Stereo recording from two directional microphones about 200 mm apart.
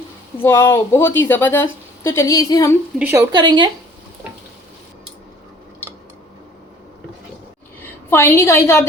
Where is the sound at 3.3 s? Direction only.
20° right (ahead or behind).